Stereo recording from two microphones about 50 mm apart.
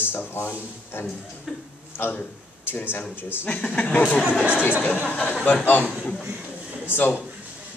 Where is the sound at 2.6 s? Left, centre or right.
Left.